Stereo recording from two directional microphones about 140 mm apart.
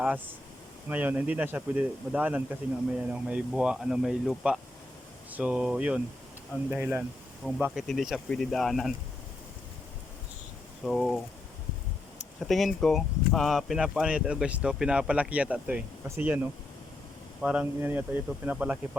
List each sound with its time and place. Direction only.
0.9 s speech: 10° right (ahead or behind)
7.4 s speech: 5° left (ahead or behind)
10.8 s speech: centre (ahead or behind)
12.4 s speech: centre (ahead or behind)